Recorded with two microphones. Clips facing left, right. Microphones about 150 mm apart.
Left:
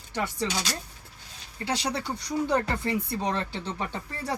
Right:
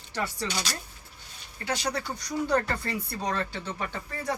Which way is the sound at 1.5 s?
30° left (ahead or behind).